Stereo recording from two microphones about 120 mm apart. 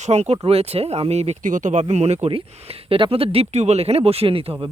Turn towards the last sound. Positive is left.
turn(degrees=-50)  # may be behind; listen again after turning